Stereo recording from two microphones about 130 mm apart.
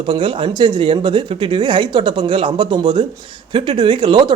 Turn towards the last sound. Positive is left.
turn(degrees=-35)  # may be behind; listen again after turning